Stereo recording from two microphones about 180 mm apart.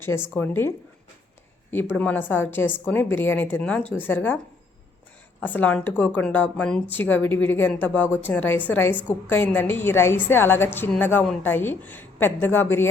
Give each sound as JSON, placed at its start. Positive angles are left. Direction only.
{"t": 0.0, "sound": "a woman's voice", "side_deg": 15}
{"t": 1.7, "sound": "a woman's voice", "side_deg": 10}
{"t": 5.4, "sound": "a woman's voice", "side_deg": 10}